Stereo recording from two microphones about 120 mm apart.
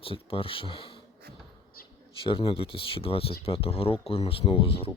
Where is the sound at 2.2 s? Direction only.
45° left (ahead or behind).